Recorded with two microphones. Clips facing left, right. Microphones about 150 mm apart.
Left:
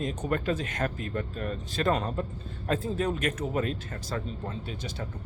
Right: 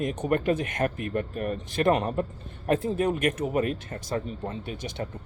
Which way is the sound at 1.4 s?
15° right (ahead or behind).